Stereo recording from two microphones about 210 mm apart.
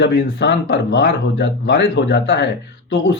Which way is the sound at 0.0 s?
55° left (ahead or behind).